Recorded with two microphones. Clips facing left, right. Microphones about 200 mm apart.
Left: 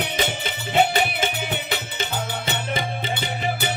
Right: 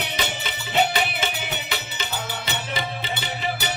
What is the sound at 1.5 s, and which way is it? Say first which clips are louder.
Music: left 3 dB; 50° left (ahead or behind).